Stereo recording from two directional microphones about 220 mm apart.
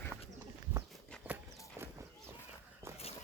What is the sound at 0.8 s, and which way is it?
Clip-clop, centre (ahead or behind).